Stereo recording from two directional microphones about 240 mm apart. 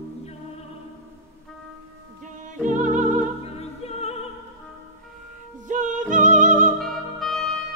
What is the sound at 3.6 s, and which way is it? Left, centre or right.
Opera, left.